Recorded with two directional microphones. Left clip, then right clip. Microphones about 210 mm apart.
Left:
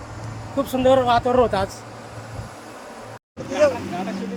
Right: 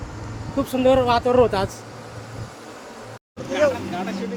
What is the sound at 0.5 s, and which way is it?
Speech, centre (ahead or behind).